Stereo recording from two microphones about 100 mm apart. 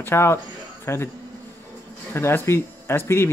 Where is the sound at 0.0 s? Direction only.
25° left (ahead or behind).